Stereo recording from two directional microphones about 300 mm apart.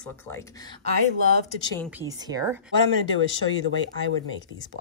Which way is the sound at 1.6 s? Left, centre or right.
Centre.